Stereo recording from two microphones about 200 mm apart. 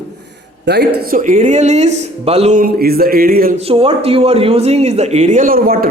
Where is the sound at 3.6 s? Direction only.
30° right (ahead or behind); by 5.9 s 45° right (ahead or behind).